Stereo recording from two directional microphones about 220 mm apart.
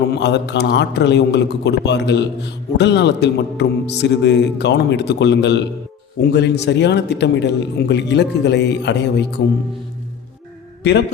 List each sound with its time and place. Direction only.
0.1 s a man's voice: 50° left (ahead or behind)